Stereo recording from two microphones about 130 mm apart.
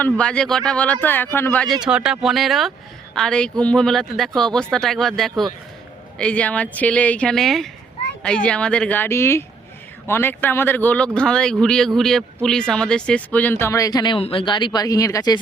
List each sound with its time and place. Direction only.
0.0 s speech: 10° left (ahead or behind)
1.6 s speech: centre (ahead or behind); by 14.2 s 30° left (ahead or behind)
14.2 s speech: 45° left (ahead or behind); by 15.4 s 30° left (ahead or behind)